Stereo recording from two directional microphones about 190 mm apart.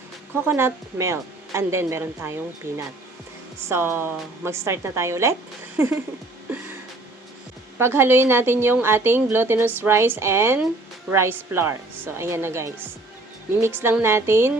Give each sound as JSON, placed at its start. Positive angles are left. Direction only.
{"t": 0.4, "sound": "a woman's voice", "side_deg": -10}
{"t": 5.7, "sound": "music", "side_deg": -15}
{"t": 7.8, "sound": "a woman's voice", "side_deg": -10}